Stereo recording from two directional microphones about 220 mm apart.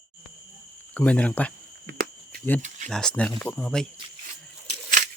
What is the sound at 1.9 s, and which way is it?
Cricket, 45° right (ahead or behind).